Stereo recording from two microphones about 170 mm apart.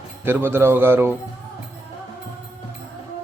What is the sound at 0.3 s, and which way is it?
Speech, 15° right (ahead or behind).